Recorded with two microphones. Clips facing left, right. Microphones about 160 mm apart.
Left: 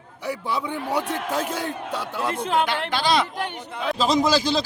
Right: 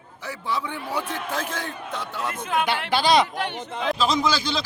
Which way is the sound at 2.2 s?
30° left (ahead or behind).